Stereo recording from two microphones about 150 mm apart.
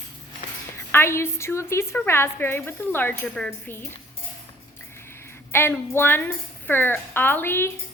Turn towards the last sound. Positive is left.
turn(degrees=15)  # may be behind; listen again after turning